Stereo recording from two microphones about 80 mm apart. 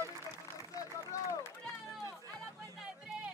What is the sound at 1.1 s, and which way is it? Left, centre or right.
Speech, left.